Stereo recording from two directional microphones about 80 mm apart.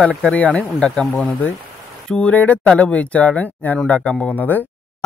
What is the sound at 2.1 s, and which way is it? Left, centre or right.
Speech, centre.